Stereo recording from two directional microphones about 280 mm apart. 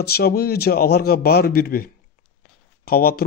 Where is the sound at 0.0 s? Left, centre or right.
Left.